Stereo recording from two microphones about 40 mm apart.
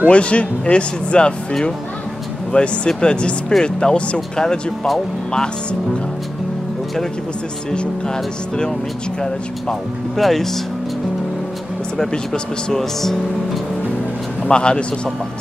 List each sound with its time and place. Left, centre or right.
0.1 s speech: left
2.5 s speech: left
7.7 s speech: left
10.1 s speech: centre
12.0 s speech: centre
14.5 s speech: left